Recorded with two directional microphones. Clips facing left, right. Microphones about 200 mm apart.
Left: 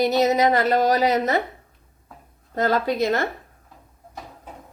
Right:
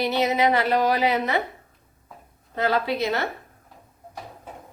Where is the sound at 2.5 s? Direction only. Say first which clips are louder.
Left 2 dB; 45° left (ahead or behind).